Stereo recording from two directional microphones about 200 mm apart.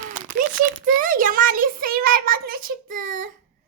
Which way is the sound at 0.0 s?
40° right (ahead or behind).